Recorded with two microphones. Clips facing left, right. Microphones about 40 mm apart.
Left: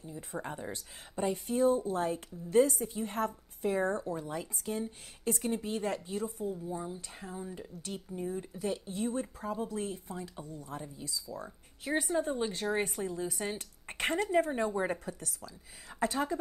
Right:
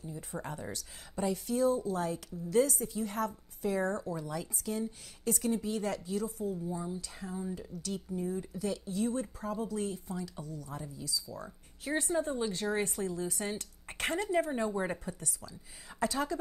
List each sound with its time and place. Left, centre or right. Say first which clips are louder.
0.3 s speech: left 2 dB; left
7.2 s speech: right 3 dB; left
7.8 s a woman's voice: right 2 dB; left